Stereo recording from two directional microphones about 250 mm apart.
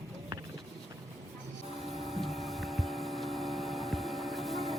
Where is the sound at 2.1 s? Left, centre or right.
Centre.